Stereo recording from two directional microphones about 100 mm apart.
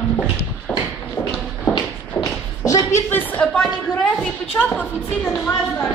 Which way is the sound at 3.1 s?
20° left (ahead or behind).